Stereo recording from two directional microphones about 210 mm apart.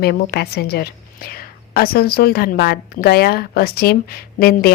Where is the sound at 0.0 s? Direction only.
50° left (ahead or behind).